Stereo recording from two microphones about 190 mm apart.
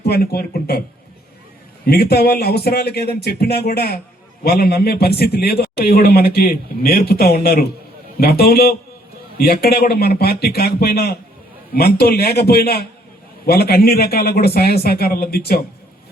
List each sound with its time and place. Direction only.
0.0 s a man's voice: 55° left (ahead or behind)
1.9 s a man's voice: 55° left (ahead or behind)